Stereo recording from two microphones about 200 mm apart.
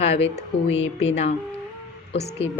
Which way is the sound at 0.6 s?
75° left (ahead or behind).